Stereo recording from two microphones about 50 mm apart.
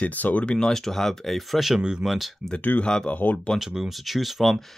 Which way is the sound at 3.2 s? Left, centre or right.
Left.